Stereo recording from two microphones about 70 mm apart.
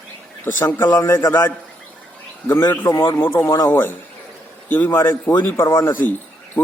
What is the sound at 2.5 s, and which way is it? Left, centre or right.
Speech, left.